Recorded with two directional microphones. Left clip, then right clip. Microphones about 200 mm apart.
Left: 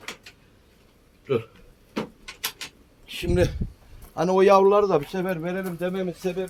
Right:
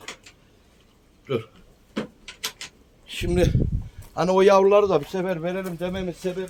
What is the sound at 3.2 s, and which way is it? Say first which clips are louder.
A man's voice: right 1 dB; 10° right (ahead or behind).